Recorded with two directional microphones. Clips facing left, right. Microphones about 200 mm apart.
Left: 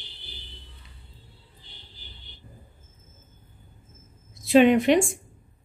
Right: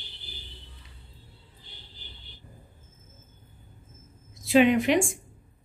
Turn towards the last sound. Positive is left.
turn(degrees=35)  # may be behind; listen again after turning